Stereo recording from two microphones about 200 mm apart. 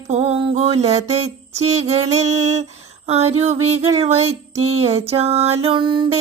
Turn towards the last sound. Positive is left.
turn(degrees=-25)  # may be behind; listen again after turning